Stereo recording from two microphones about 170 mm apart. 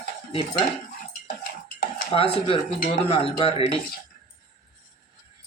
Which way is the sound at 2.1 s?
35° left (ahead or behind).